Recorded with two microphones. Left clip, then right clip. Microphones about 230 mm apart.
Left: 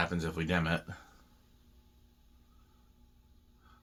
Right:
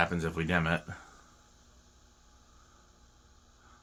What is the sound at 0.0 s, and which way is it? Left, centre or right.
Speech, right.